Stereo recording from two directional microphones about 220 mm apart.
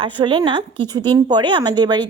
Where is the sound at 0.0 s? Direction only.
20° right (ahead or behind).